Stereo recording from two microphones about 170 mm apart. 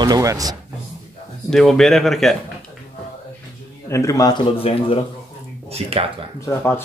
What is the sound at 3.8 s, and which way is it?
Speech, 20° left (ahead or behind).